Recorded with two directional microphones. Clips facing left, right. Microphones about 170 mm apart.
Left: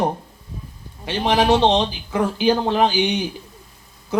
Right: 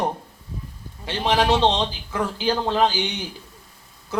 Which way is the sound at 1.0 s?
15° left (ahead or behind).